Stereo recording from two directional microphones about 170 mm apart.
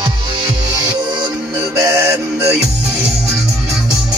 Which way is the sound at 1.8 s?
20° right (ahead or behind).